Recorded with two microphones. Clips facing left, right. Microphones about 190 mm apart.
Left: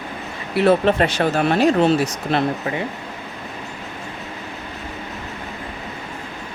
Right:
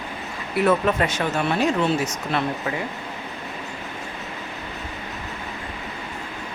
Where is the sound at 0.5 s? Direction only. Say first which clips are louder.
Left 4 dB; 30° left (ahead or behind).